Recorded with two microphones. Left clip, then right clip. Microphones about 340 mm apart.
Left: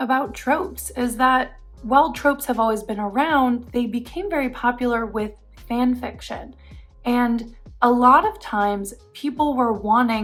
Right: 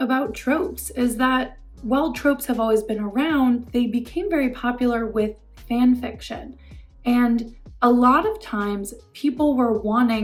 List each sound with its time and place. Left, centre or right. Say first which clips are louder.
0.0 s speech: left 2 dB; centre